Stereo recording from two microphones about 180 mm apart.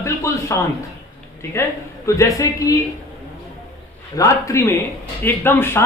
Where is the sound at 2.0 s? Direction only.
15° left (ahead or behind).